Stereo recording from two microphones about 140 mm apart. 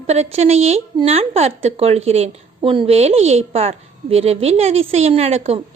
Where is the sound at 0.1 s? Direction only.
50° right (ahead or behind).